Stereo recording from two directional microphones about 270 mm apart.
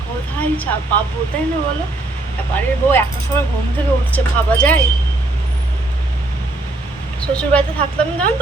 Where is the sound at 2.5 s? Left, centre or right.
Centre.